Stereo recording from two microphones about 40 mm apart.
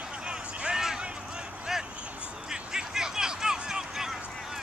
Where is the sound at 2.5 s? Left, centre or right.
Centre.